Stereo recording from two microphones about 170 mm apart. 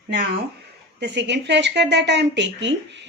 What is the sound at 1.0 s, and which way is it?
A woman's voice, 90° right.